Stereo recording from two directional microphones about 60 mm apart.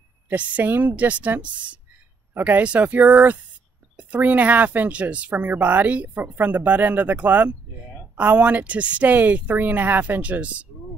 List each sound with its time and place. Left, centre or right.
0.3 s speech: right
6.2 s speech: right